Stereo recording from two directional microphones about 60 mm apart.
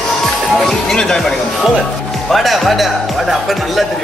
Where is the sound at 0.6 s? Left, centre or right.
Centre.